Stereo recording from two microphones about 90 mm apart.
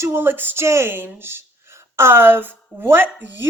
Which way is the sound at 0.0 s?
25° right (ahead or behind).